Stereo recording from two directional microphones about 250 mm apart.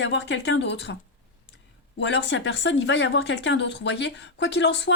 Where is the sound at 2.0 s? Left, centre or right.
Left.